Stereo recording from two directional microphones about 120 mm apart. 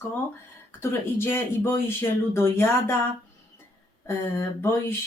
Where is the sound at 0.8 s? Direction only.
20° left (ahead or behind).